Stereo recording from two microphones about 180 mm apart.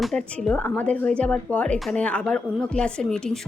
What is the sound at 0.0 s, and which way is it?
Speech, 5° left (ahead or behind).